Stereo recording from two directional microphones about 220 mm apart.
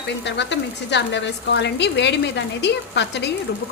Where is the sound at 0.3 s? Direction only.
50° left (ahead or behind).